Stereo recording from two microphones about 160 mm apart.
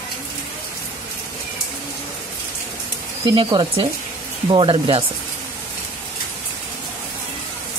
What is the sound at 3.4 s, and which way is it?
Speech, 30° right (ahead or behind).